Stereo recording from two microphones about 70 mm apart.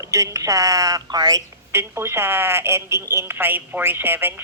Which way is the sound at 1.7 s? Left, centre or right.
Right.